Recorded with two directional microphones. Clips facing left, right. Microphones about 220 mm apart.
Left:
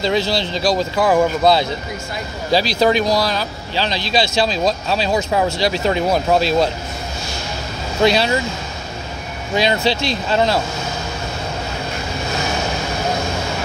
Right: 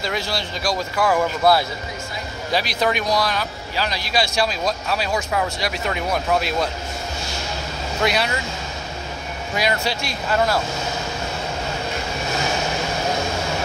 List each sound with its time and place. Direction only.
0.0 s speech: 25° left (ahead or behind)
2.5 s speech: 30° left (ahead or behind)
8.0 s speech: 30° left (ahead or behind)
9.6 s speech: 25° left (ahead or behind)